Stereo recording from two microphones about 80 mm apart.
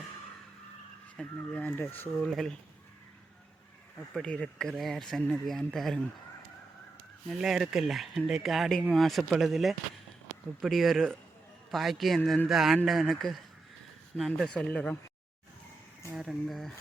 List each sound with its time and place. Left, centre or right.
1.1 s speech: centre
2.2 s speech: centre
4.1 s speech: centre
7.3 s speech: centre
16.1 s speech: centre